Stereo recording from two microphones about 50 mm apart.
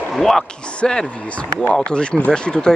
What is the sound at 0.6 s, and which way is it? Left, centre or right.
Speech, left.